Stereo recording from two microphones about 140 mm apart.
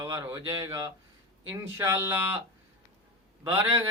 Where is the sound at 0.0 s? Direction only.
25° right (ahead or behind).